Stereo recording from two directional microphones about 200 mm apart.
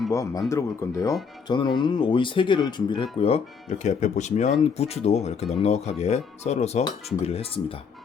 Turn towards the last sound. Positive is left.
turn(degrees=30)  # may be behind; listen again after turning